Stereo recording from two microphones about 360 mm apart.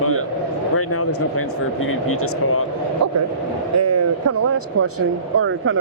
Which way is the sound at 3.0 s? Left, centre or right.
Right.